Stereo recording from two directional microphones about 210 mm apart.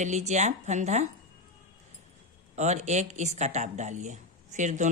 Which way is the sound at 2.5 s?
35° right (ahead or behind).